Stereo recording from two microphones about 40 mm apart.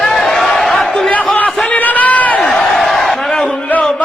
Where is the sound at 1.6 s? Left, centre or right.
Left.